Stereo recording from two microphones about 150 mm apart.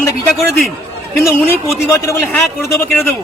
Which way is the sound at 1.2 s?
20° left (ahead or behind).